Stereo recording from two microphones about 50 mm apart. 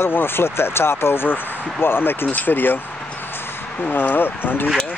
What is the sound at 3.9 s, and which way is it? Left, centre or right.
Speech, left.